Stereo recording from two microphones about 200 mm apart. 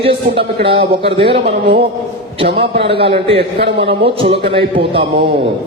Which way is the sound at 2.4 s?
30° right (ahead or behind).